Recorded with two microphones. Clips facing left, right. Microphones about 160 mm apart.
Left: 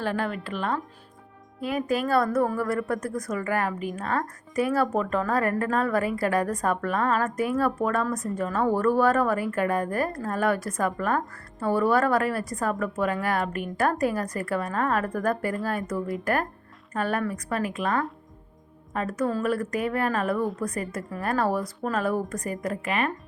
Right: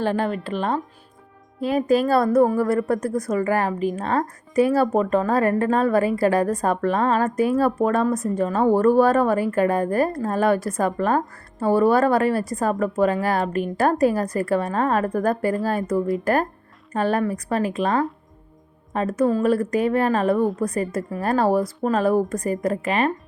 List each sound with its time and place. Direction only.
0.0 s a woman's voice: 25° right (ahead or behind)